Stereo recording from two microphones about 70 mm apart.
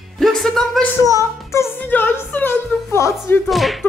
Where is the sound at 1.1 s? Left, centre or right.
Left.